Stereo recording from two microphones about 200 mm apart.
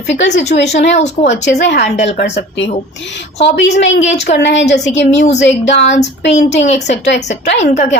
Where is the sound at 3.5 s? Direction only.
60° left (ahead or behind).